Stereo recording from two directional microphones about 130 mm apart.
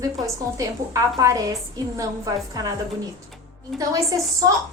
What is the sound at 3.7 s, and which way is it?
Speech, 30° right (ahead or behind).